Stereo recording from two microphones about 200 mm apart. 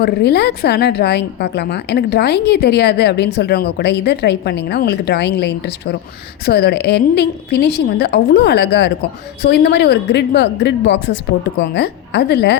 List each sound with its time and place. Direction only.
0.0 s a woman's voice: 55° left (ahead or behind)